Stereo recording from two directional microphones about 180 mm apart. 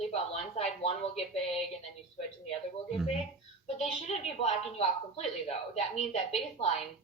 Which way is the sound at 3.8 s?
35° left (ahead or behind).